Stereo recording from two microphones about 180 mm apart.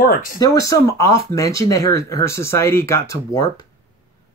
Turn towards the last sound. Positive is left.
turn(degrees=15)  # may be behind; listen again after turning